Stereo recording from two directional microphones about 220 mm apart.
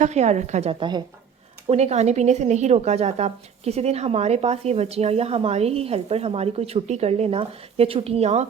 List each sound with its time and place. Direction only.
0.0 s a woman's voice: 30° right (ahead or behind)